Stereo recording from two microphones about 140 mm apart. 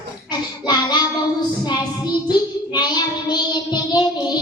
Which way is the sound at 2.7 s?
30° left (ahead or behind).